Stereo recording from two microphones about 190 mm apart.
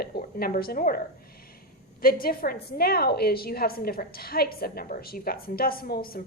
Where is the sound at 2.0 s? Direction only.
50° left (ahead or behind).